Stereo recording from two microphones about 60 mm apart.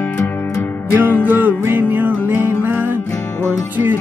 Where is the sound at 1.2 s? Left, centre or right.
Right.